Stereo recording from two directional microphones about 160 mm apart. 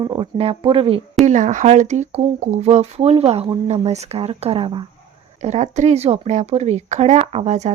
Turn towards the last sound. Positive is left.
turn(degrees=-45)  # may be behind; listen again after turning